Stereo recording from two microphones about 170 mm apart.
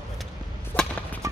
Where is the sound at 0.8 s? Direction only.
5° left (ahead or behind).